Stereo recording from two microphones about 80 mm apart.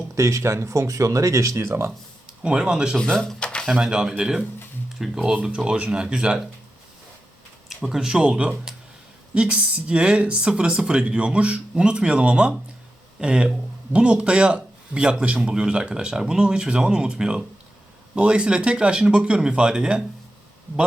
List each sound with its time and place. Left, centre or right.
0.2 s speech: right
2.4 s speech: centre
3.0 s speech: centre
3.7 s speech: centre
7.7 s speech: centre